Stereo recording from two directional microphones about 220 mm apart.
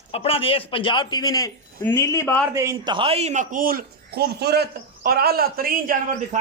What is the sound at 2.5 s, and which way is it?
A man's voice, 15° right (ahead or behind).